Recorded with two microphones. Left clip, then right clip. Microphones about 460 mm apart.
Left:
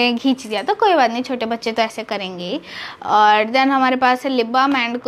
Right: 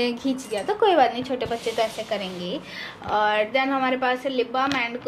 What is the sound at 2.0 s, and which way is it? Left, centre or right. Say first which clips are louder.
A woman's voice: left 4 dB; left.